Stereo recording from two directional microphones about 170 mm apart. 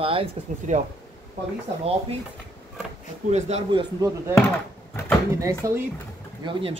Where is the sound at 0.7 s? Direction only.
45° right (ahead or behind).